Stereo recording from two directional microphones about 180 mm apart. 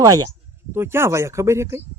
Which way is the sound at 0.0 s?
20° right (ahead or behind).